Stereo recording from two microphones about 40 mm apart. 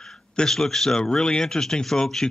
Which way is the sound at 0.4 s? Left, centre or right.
Centre.